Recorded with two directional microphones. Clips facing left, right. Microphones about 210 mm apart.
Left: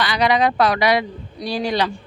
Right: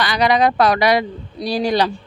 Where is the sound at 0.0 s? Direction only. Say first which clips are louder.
Right 2 dB; 40° right (ahead or behind).